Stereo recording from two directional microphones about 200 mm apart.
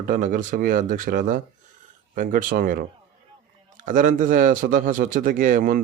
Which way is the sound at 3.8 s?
40° right (ahead or behind).